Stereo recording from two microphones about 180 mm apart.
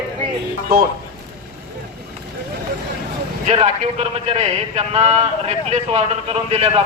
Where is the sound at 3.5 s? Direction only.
35° right (ahead or behind).